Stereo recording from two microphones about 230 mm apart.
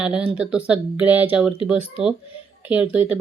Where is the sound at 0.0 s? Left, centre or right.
Centre.